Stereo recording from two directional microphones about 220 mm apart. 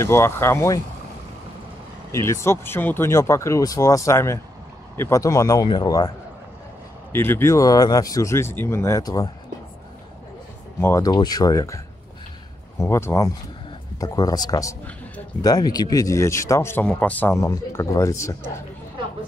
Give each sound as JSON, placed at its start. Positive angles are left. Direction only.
{"t": 0.0, "sound": "speech", "side_deg": 10}
{"t": 2.1, "sound": "speech", "side_deg": 10}
{"t": 10.8, "sound": "speech", "side_deg": 15}
{"t": 12.8, "sound": "speech", "side_deg": 10}